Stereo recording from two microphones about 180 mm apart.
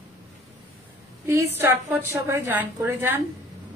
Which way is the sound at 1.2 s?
10° right (ahead or behind).